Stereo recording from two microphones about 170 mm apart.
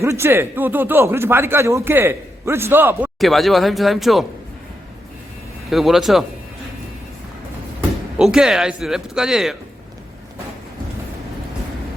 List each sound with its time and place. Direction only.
0.0 s speech: 15° right (ahead or behind)
3.2 s speech: centre (ahead or behind)
5.7 s speech: centre (ahead or behind)
7.8 s speech: 5° right (ahead or behind)